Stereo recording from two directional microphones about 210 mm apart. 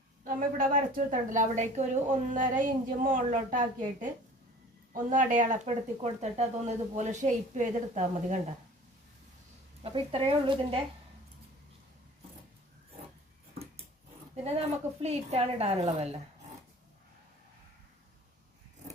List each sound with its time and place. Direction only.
0.3 s a woman's voice: 40° right (ahead or behind)
5.0 s a woman's voice: 40° right (ahead or behind)
9.8 s a woman's voice: 25° right (ahead or behind)
15.0 s a woman's voice: 30° right (ahead or behind)